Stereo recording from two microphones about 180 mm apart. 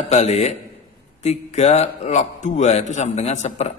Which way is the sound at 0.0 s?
40° left (ahead or behind).